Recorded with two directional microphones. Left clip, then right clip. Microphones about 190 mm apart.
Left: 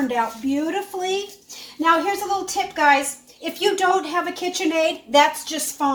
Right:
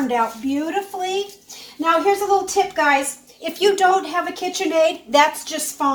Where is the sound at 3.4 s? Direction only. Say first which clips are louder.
Right 4 dB; 30° right (ahead or behind).